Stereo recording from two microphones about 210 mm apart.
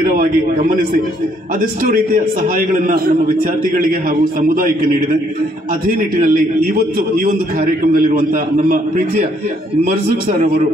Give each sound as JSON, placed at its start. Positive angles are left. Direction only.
{"t": 0.0, "sound": "a man's voice", "side_deg": -40}
{"t": 5.9, "sound": "a man's voice", "side_deg": -40}